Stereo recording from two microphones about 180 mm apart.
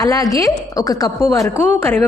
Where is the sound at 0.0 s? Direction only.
20° left (ahead or behind).